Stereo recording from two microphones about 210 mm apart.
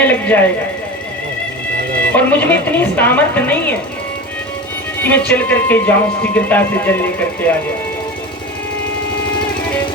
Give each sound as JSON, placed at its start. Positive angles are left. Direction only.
{"t": 0.0, "sound": "a sound", "side_deg": 10}
{"t": 2.1, "sound": "speech", "side_deg": 10}
{"t": 5.0, "sound": "speech", "side_deg": 10}